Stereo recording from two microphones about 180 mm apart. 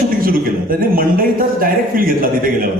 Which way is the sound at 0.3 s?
50° right (ahead or behind).